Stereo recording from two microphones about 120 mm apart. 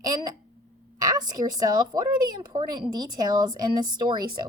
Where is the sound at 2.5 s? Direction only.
35° right (ahead or behind).